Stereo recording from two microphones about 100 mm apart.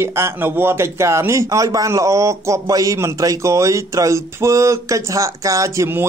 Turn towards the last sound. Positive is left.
turn(degrees=-25)  # may be behind; listen again after turning